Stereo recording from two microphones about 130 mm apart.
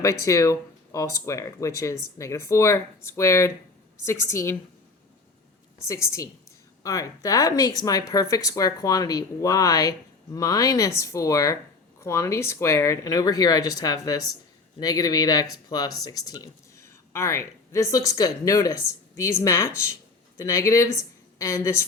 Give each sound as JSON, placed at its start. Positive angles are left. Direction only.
{"t": 0.0, "sound": "speech", "side_deg": 25}
{"t": 5.9, "sound": "speech", "side_deg": 25}